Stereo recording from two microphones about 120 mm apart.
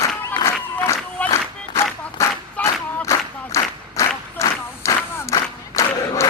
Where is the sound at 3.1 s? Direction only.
25° left (ahead or behind).